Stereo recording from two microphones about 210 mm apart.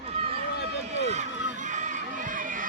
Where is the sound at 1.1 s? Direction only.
35° right (ahead or behind).